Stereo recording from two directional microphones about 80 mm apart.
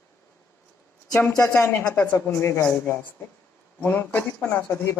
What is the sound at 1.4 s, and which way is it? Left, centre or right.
A woman's voice, left.